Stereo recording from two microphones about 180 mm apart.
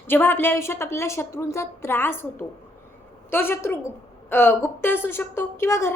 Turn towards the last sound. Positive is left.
turn(degrees=15)  # may be behind; listen again after turning